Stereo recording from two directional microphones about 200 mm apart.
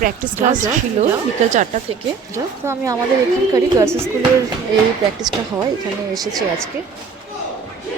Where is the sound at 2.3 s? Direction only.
15° right (ahead or behind).